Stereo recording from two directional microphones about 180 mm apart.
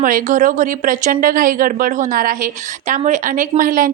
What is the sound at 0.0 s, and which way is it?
A woman's voice, 45° right (ahead or behind).